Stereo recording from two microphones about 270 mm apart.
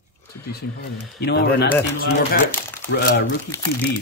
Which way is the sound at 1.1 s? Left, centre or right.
Left.